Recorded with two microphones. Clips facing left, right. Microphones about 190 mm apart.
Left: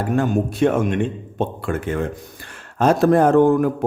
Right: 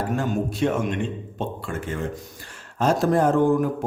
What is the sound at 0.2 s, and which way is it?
A man's voice, 55° left (ahead or behind).